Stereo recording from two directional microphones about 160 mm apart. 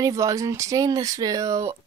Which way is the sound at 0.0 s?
20° right (ahead or behind).